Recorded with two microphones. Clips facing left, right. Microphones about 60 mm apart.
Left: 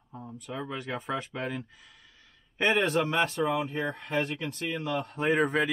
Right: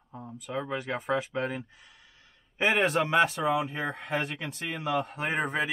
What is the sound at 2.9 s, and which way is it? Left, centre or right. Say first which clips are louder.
Speech: right 2 dB; right.